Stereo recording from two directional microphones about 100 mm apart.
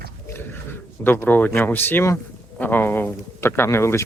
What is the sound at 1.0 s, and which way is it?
Speech, 20° left (ahead or behind).